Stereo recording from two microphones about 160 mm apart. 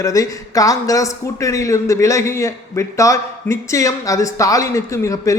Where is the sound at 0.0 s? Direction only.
20° left (ahead or behind).